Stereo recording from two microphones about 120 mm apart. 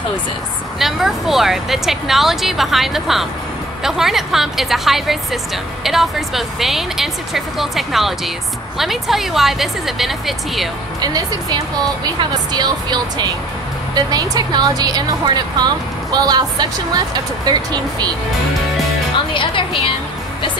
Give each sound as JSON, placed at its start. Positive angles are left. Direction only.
{"t": 0.7, "sound": "speech", "side_deg": 0}
{"t": 11.0, "sound": "a woman's voice", "side_deg": -30}
{"t": 19.3, "sound": "speech", "side_deg": 45}